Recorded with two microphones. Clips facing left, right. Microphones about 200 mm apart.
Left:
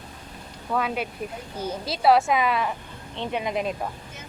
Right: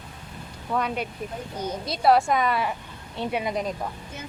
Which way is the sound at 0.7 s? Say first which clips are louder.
Left 1 dB; 5° left (ahead or behind).